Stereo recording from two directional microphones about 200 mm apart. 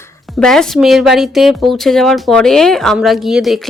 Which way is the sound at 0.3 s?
5° left (ahead or behind).